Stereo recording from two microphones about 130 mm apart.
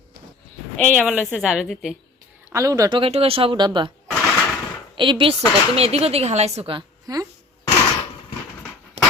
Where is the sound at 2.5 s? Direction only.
25° right (ahead or behind).